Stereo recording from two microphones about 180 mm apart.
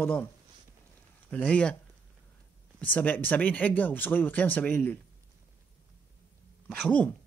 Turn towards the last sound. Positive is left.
turn(degrees=5)  # may be behind; listen again after turning